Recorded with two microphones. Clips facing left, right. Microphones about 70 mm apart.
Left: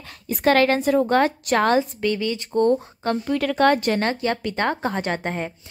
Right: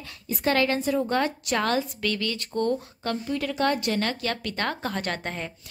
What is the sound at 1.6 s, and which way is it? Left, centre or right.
Speech, left.